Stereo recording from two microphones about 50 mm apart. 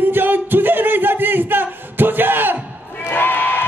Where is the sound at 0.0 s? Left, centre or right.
Right.